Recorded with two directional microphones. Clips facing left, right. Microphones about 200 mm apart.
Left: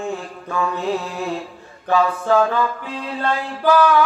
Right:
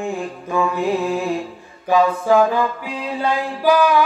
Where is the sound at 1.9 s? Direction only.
15° right (ahead or behind).